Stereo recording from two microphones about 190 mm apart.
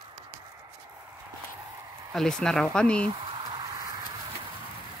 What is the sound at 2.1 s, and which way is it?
Speech, centre (ahead or behind).